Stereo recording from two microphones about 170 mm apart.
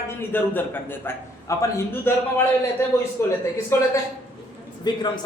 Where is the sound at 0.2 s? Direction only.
10° left (ahead or behind).